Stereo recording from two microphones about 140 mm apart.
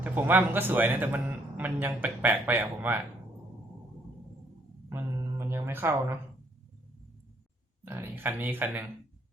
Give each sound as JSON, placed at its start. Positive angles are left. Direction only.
{"t": 0.0, "sound": "a man's voice", "side_deg": -15}
{"t": 4.9, "sound": "a sound", "side_deg": -20}
{"t": 7.9, "sound": "a man's voice", "side_deg": -15}